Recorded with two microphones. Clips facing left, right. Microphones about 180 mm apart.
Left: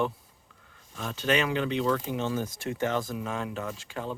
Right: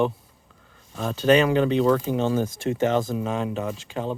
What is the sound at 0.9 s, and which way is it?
Speech, 35° right (ahead or behind).